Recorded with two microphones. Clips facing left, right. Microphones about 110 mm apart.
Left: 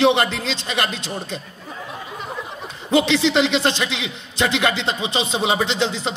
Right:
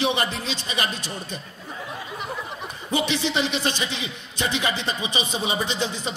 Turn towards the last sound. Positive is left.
turn(degrees=70)  # may be behind; listen again after turning